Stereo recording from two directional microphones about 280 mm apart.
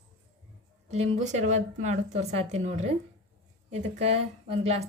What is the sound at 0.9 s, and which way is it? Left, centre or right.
Speech, right.